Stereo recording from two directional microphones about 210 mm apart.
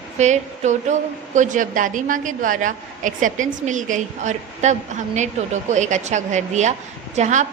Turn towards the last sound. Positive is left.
turn(degrees=-35)  # may be behind; listen again after turning